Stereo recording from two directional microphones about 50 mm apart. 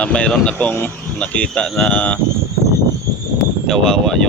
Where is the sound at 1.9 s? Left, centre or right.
Left.